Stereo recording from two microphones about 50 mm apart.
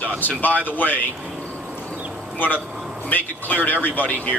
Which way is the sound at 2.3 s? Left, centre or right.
Left.